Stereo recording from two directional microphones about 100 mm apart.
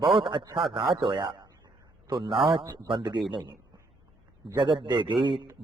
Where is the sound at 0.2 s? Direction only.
55° right (ahead or behind).